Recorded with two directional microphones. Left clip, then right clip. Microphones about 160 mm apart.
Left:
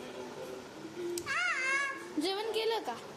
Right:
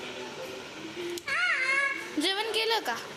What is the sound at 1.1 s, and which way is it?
Music, 10° left (ahead or behind).